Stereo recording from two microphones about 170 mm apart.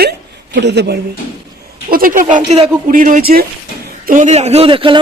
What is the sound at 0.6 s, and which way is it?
Speech, 85° right.